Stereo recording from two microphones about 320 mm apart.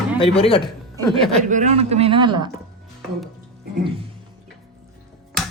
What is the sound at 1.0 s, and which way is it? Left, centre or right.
Speech, centre.